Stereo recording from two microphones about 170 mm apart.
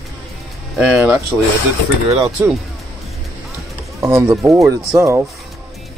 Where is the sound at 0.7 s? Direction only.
5° right (ahead or behind).